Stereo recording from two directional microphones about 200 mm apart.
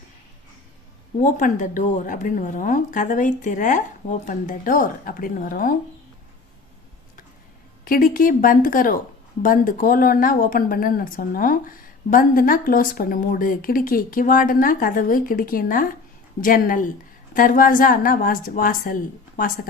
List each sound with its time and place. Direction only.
1.2 s speech: 40° left (ahead or behind)
7.9 s speech: 45° left (ahead or behind)